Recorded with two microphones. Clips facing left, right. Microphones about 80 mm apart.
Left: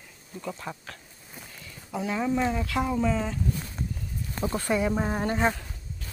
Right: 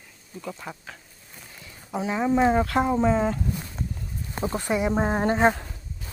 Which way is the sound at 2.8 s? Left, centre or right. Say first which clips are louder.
Right 5 dB; right.